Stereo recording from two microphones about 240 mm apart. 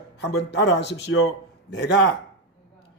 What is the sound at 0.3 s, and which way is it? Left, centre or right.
A man's voice, left.